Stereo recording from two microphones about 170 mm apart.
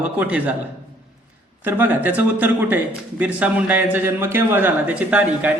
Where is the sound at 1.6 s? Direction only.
10° right (ahead or behind).